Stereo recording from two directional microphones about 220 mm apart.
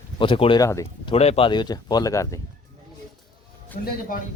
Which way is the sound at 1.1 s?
25° left (ahead or behind).